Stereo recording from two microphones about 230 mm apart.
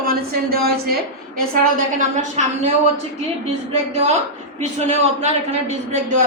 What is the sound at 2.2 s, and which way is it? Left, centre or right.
Speech, right.